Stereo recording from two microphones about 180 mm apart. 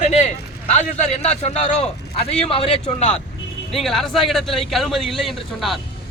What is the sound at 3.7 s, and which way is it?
A man's voice, centre (ahead or behind).